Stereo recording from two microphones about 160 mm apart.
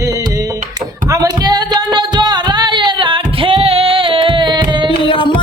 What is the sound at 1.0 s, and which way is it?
Music, 20° right (ahead or behind).